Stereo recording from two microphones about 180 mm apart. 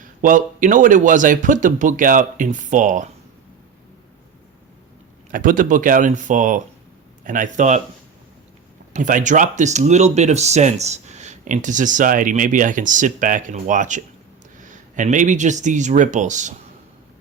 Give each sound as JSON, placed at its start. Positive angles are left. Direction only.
{"t": 0.2, "sound": "speech", "side_deg": -45}
{"t": 5.3, "sound": "speech", "side_deg": -50}
{"t": 8.9, "sound": "speech", "side_deg": -45}